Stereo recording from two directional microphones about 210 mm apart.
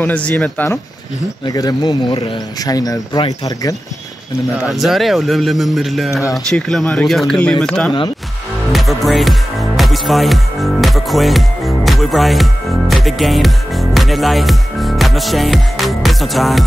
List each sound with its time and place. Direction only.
0.0 s speech: 5° left (ahead or behind)
1.4 s speech: 15° left (ahead or behind)
4.6 s a man's voice: centre (ahead or behind)
8.7 s music: centre (ahead or behind)